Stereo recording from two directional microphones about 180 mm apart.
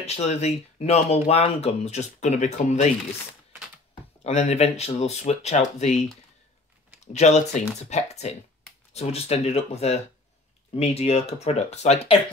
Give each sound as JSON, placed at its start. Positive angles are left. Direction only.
{"t": 0.0, "sound": "speech", "side_deg": 35}
{"t": 4.2, "sound": "speech", "side_deg": 35}
{"t": 7.1, "sound": "speech", "side_deg": 40}